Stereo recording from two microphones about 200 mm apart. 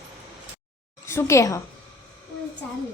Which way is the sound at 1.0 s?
15° left (ahead or behind).